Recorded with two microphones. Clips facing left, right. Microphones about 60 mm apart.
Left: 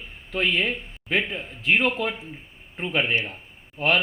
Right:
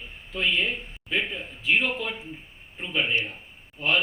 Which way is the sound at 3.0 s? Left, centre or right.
Left.